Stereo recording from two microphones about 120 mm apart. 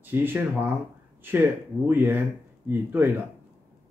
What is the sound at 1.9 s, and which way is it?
Speech, 15° right (ahead or behind).